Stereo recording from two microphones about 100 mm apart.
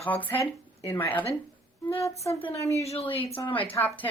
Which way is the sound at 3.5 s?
15° left (ahead or behind).